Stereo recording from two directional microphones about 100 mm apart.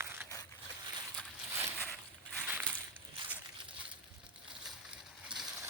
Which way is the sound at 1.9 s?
Centre (ahead or behind).